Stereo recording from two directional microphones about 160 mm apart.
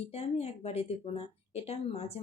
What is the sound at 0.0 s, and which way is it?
Speech, 40° left (ahead or behind).